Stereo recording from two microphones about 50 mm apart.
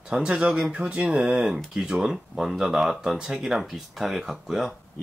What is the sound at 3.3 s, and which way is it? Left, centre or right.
Speech, centre.